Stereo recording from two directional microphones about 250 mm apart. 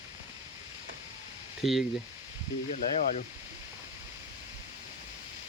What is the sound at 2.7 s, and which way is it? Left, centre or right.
Speech, left.